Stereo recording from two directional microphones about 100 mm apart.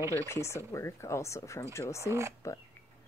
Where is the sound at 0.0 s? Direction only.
35° right (ahead or behind).